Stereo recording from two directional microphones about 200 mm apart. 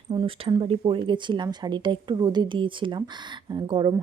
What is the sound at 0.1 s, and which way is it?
Speech, 25° right (ahead or behind).